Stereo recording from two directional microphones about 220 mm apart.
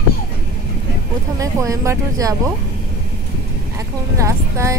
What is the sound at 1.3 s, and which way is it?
Speech, 15° right (ahead or behind).